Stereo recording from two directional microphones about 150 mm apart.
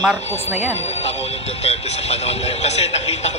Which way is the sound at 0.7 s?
45° left (ahead or behind).